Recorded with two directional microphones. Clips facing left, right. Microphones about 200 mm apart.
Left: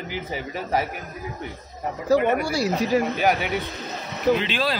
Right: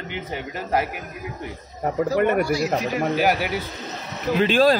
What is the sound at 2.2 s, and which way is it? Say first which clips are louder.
Speech: right 3 dB; 55° right (ahead or behind).